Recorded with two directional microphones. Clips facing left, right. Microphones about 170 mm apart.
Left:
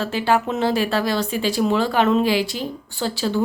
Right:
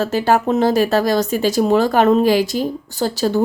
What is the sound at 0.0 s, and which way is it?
Speech, 45° right (ahead or behind).